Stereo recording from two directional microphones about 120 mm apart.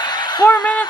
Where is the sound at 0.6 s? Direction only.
10° left (ahead or behind).